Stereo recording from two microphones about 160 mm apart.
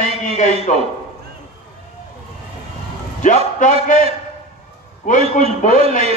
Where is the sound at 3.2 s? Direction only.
50° left (ahead or behind).